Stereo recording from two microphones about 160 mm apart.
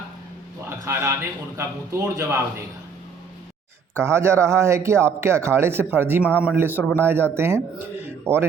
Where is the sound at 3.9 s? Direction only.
15° right (ahead or behind).